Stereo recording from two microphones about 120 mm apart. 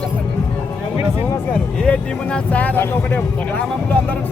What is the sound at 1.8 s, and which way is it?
Vehicle, 10° left (ahead or behind).